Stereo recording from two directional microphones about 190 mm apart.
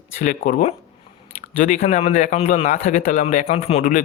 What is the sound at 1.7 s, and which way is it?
Speech, 35° left (ahead or behind).